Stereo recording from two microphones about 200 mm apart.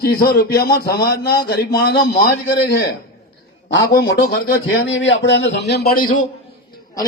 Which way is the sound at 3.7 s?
55° left (ahead or behind).